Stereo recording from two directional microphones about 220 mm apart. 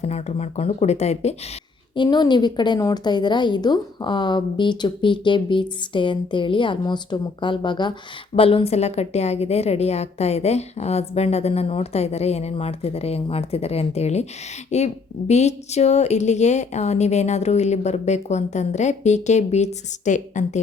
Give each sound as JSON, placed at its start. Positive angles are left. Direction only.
{"t": 0.0, "sound": "a woman's voice", "side_deg": 30}